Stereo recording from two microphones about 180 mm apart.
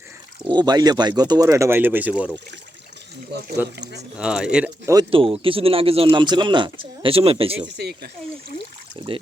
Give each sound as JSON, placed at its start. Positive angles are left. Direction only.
{"t": 0.4, "sound": "speech", "side_deg": -25}
{"t": 3.3, "sound": "speech", "side_deg": -65}
{"t": 4.2, "sound": "speech", "side_deg": -5}
{"t": 5.1, "sound": "speech", "side_deg": -30}
{"t": 7.8, "sound": "speech", "side_deg": -65}
{"t": 9.0, "sound": "speech", "side_deg": -25}